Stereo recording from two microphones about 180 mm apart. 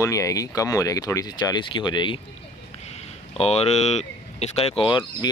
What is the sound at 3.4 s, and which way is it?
Speech, 35° left (ahead or behind).